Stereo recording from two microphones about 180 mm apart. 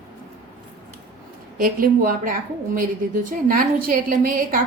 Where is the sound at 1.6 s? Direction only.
50° right (ahead or behind).